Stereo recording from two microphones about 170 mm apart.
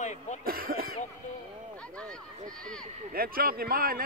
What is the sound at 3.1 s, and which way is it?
Speech, 60° right (ahead or behind).